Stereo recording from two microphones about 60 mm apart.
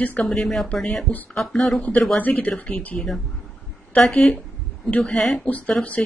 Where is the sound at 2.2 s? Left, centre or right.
Left.